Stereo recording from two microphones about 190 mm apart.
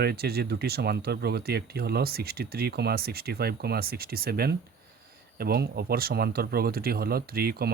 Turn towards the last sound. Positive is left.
turn(degrees=-55)  # may be behind; listen again after turning